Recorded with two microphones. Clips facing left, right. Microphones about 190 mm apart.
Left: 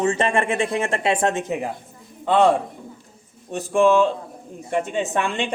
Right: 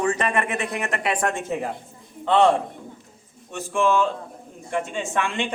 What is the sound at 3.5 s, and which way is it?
Speech, 35° left (ahead or behind).